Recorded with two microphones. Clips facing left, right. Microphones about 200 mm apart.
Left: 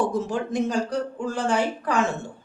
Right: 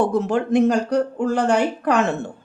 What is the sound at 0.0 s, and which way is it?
Speech, 65° right (ahead or behind).